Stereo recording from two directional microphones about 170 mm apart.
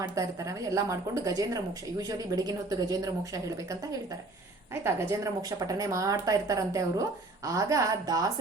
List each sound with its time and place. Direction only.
0.0 s speech: 20° right (ahead or behind)